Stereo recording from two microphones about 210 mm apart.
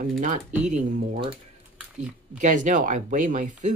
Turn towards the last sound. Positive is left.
turn(degrees=-35)  # may be behind; listen again after turning